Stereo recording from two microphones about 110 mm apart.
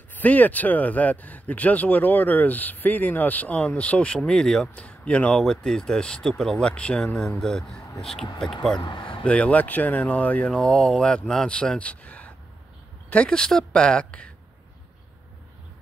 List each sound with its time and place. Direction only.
0.1 s speech: 15° left (ahead or behind)
8.7 s speech: 45° left (ahead or behind)
9.2 s speech: 10° left (ahead or behind)